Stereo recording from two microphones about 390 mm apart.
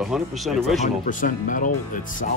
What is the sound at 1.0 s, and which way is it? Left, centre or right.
Speech, centre.